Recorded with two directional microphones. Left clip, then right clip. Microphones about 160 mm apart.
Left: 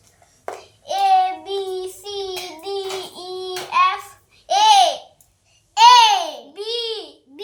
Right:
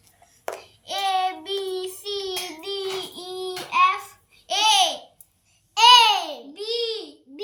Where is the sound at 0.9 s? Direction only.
15° left (ahead or behind).